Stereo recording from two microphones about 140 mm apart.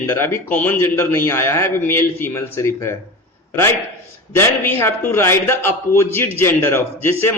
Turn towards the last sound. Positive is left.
turn(degrees=15)  # may be behind; listen again after turning